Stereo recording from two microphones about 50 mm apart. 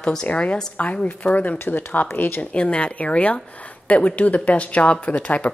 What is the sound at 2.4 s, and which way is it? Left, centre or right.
Speech, left.